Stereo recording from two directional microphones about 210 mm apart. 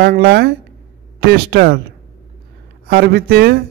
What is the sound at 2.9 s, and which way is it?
Speech, 50° right (ahead or behind).